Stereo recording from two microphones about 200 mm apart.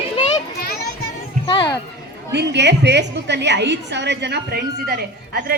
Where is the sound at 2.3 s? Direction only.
60° right (ahead or behind).